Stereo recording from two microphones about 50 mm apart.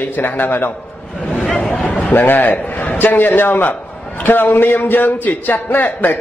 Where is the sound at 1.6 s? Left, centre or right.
Centre.